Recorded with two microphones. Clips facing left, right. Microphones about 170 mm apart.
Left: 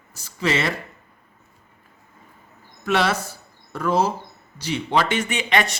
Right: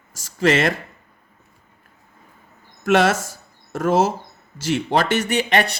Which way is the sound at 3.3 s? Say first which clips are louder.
Right 4 dB; 45° right (ahead or behind).